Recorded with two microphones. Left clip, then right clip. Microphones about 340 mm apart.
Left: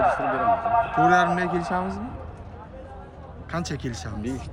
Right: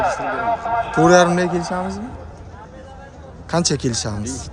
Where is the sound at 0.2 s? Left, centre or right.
Right.